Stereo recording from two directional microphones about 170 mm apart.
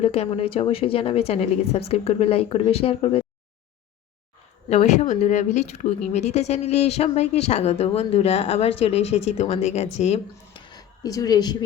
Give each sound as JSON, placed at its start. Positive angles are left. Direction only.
{"t": 0.0, "sound": "speech", "side_deg": 35}
{"t": 4.7, "sound": "speech", "side_deg": 40}
{"t": 10.7, "sound": "a sound", "side_deg": 20}